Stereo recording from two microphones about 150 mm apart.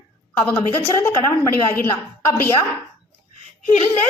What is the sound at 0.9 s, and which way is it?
A woman's voice, 20° left (ahead or behind).